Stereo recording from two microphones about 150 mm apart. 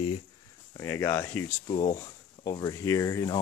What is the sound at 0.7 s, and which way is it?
Speech, 20° left (ahead or behind).